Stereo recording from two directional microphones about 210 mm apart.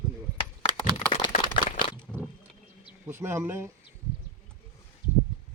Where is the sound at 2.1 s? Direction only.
Centre (ahead or behind).